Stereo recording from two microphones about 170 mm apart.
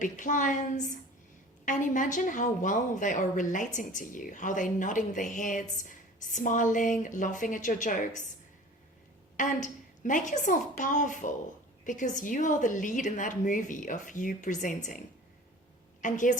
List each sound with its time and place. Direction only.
0.0 s a woman's voice: 50° left (ahead or behind)
9.4 s a woman's voice: 50° left (ahead or behind)